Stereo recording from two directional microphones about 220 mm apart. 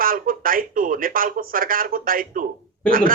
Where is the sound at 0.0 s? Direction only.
40° right (ahead or behind).